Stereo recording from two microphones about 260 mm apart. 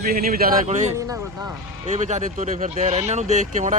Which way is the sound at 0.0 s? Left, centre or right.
Right.